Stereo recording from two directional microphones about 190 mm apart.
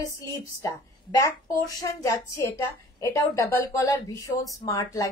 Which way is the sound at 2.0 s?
15° left (ahead or behind).